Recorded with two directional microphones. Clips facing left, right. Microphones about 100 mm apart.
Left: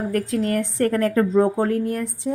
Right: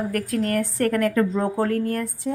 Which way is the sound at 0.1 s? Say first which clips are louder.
Left 2 dB; 25° left (ahead or behind).